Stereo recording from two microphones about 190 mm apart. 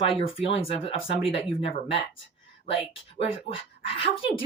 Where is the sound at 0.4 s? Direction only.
30° left (ahead or behind).